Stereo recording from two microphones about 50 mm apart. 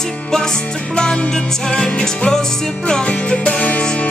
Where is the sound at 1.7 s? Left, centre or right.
Centre.